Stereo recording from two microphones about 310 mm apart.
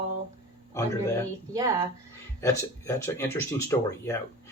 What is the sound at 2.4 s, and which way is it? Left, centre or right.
Speech, centre.